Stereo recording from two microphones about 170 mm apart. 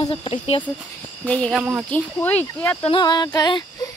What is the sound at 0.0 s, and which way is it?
Speech, 35° left (ahead or behind).